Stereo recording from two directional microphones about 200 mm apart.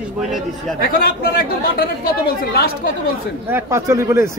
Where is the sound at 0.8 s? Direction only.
50° left (ahead or behind).